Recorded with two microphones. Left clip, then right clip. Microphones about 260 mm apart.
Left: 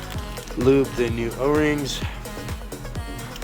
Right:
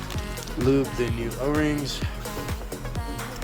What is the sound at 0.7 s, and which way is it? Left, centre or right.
Speech, centre.